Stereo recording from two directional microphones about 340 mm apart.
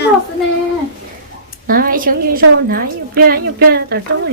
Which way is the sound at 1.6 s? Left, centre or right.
Right.